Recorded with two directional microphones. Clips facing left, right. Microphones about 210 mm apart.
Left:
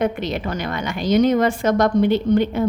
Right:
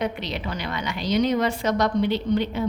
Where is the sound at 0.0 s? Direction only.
50° left (ahead or behind).